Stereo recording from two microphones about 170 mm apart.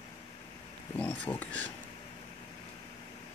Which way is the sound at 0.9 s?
10° left (ahead or behind).